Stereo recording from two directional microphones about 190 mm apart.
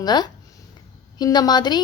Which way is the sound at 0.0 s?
20° left (ahead or behind).